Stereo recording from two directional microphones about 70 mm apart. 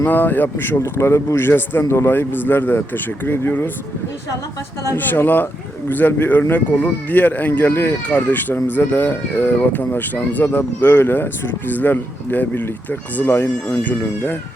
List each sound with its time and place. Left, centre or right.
0.0 s speech: left
1.8 s speech: left
2.0 s speech: left
4.9 s speech: left